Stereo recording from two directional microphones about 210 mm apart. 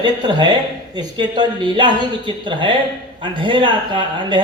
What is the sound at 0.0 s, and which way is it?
A man's voice, 20° right (ahead or behind).